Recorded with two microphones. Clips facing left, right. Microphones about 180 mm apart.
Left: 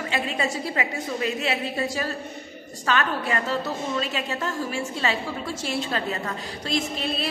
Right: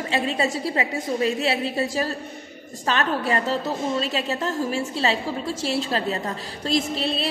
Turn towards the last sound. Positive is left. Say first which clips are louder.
# right 3 dB
turn(degrees=-35)  # may be behind; listen again after turning